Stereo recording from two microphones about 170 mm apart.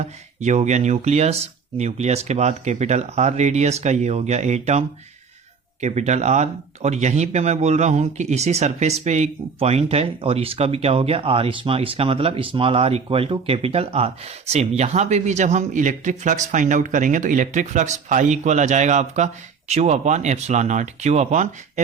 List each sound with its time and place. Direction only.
0.0 s speech: 45° right (ahead or behind)